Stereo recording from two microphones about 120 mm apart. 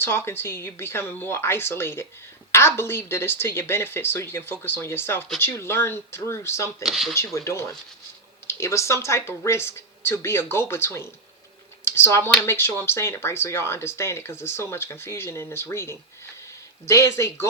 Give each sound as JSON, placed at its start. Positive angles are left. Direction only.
{"t": 0.0, "sound": "speech", "side_deg": 20}
{"t": 6.8, "sound": "speech", "side_deg": 0}
{"t": 7.1, "sound": "speech", "side_deg": 25}